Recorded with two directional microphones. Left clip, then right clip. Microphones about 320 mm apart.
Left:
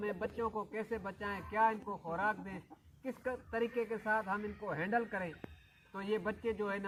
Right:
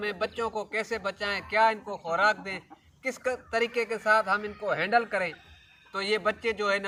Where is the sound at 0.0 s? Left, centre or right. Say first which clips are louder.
Right 8 dB; centre.